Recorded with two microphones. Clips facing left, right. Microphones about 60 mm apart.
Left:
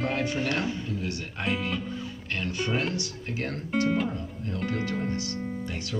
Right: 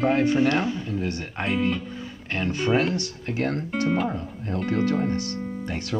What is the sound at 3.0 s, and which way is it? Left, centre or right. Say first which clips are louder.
Speech: right 5 dB; right.